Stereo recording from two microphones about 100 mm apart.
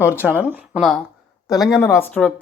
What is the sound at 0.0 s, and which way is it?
Speech, 20° right (ahead or behind).